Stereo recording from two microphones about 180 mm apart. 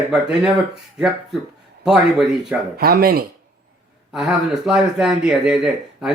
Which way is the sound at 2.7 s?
60° right (ahead or behind).